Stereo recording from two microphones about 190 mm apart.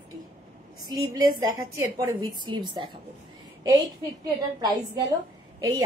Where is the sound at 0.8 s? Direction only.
20° right (ahead or behind).